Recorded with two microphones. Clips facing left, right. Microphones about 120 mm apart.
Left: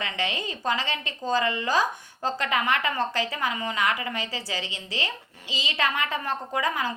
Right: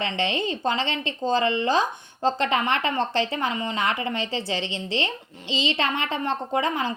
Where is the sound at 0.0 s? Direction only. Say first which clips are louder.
Right 5 dB; 30° right (ahead or behind).